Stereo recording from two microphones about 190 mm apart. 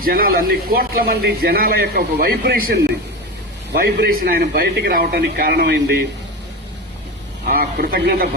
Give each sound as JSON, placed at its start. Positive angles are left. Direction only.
{"t": 0.0, "sound": "a man's voice", "side_deg": -50}
{"t": 7.4, "sound": "a man's voice", "side_deg": -50}